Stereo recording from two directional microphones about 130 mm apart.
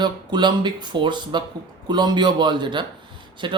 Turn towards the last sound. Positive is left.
turn(degrees=-40)  # may be behind; listen again after turning